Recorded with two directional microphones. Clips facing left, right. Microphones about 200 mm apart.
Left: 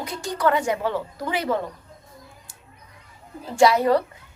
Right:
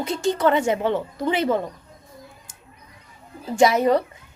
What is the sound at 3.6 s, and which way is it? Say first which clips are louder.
Speech: even; 20° right (ahead or behind).